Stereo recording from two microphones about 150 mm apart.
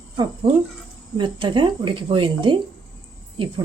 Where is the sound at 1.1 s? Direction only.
30° right (ahead or behind).